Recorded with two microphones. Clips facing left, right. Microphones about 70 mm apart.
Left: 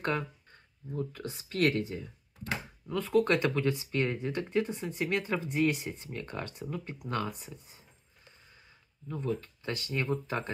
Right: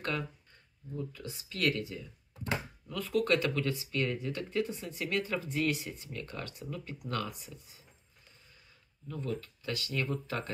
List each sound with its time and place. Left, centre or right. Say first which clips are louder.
0.9 s speech: left 4 dB; left
9.0 s speech: left 3 dB; left